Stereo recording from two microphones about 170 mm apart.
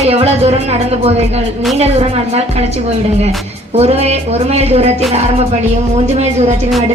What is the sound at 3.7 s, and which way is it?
A woman's voice, 40° right (ahead or behind).